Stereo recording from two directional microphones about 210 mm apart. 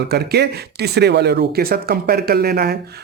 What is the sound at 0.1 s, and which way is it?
Speech, 50° right (ahead or behind).